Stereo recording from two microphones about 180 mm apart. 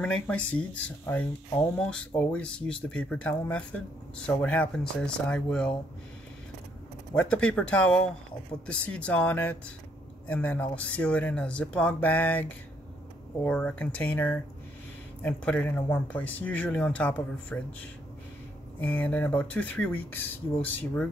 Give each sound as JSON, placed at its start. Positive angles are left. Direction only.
{"t": 0.0, "sound": "speech", "side_deg": 5}
{"t": 7.2, "sound": "speech", "side_deg": 5}
{"t": 18.8, "sound": "speech", "side_deg": 10}